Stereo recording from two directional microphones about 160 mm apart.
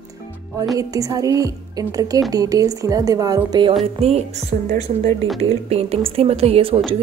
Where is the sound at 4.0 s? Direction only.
40° right (ahead or behind).